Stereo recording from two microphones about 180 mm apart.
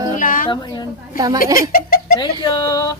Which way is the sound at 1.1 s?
20° right (ahead or behind).